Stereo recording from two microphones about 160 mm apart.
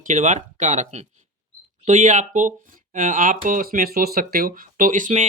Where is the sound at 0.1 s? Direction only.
50° right (ahead or behind).